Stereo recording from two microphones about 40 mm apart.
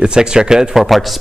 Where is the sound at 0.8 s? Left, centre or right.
Centre.